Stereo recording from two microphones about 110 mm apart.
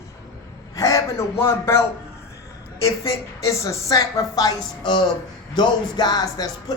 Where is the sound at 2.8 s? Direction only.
30° left (ahead or behind).